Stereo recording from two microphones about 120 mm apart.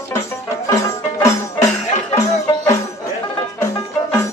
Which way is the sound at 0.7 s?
25° left (ahead or behind).